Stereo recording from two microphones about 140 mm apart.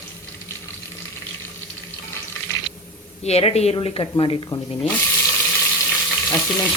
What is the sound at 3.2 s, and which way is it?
Speech, 50° left (ahead or behind).